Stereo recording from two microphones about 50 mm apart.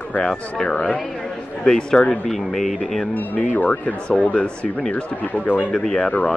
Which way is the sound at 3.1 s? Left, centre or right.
Left.